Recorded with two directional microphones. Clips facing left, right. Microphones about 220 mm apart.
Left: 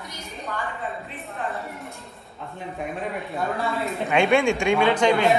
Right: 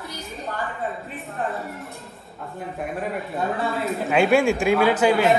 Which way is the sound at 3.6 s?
Centre (ahead or behind).